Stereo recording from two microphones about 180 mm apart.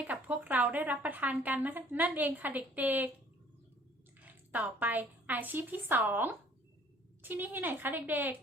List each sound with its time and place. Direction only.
0.0 s speech: 10° right (ahead or behind)
4.2 s a woman's voice: 10° right (ahead or behind)